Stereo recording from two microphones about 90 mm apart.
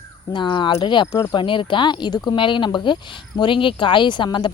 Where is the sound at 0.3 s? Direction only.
60° left (ahead or behind).